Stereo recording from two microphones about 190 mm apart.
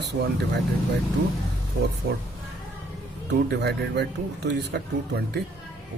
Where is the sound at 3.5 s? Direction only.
60° right (ahead or behind).